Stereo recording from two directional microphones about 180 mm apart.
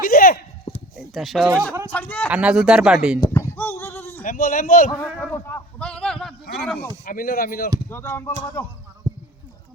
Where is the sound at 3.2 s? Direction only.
15° left (ahead or behind).